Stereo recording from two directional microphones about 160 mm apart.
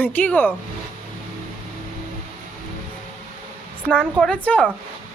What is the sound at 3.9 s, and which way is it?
Speech, 5° left (ahead or behind).